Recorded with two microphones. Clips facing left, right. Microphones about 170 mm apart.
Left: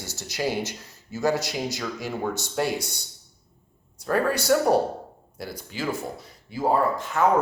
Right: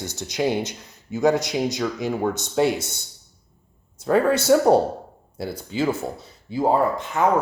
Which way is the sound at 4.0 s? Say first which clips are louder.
Right 5 dB; 25° right (ahead or behind).